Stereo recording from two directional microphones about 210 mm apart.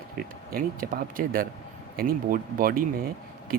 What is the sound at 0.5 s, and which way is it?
Speech, 45° right (ahead or behind).